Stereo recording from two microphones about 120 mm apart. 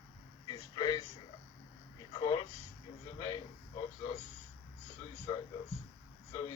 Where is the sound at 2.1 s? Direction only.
35° left (ahead or behind).